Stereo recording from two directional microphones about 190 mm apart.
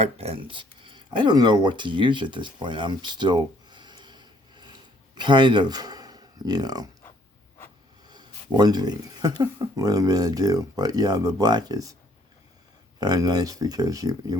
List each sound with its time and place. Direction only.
0.0 s speech: 35° right (ahead or behind)
8.1 s speech: 20° right (ahead or behind)
13.0 s speech: 20° right (ahead or behind)